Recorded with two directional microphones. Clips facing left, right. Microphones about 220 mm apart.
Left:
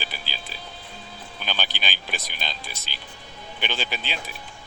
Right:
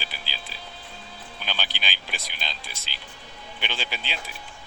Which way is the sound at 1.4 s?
50° left (ahead or behind).